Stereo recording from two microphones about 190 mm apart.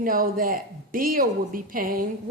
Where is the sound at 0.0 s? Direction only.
45° right (ahead or behind).